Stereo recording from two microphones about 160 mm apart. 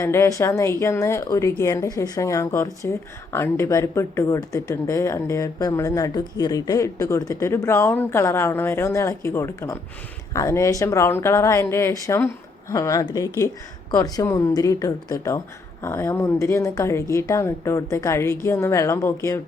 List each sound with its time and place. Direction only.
0.0 s a woman's voice: 15° left (ahead or behind)